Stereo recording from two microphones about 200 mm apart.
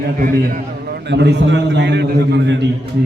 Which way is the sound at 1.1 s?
60° right (ahead or behind).